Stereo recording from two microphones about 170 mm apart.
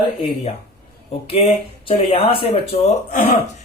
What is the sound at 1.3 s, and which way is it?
Speech, 35° left (ahead or behind).